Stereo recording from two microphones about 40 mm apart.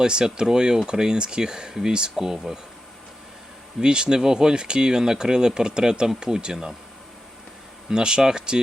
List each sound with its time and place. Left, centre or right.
0.0 s speech: centre
3.8 s speech: centre
7.9 s speech: centre